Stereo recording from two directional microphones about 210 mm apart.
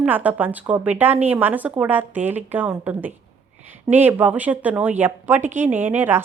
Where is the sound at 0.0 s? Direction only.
5° right (ahead or behind).